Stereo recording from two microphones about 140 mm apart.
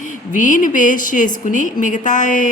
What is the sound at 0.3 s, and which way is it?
Speech, 70° left (ahead or behind).